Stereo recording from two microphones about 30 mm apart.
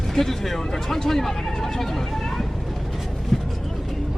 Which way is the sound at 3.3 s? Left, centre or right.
Centre.